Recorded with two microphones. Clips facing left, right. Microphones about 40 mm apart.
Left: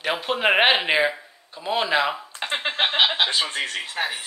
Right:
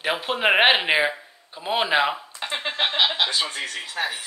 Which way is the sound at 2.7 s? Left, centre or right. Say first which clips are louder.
Left 1 dB; left.